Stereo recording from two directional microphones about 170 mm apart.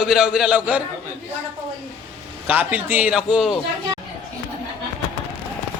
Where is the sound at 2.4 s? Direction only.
10° right (ahead or behind).